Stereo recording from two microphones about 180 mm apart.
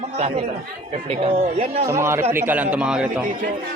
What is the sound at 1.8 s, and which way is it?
A man's voice, 15° right (ahead or behind).